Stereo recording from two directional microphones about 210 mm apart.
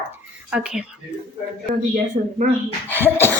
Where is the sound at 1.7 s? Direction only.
40° right (ahead or behind).